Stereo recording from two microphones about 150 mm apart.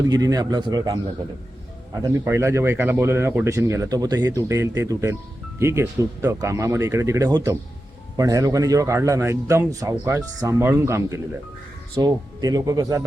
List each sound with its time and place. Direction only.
0.1 s speech: 25° right (ahead or behind)
2.0 s speech: 20° right (ahead or behind)